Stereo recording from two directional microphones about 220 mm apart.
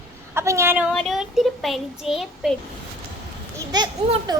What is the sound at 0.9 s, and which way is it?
Speech, centre (ahead or behind).